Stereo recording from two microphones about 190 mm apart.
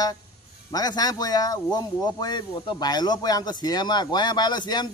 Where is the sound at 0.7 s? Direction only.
20° left (ahead or behind).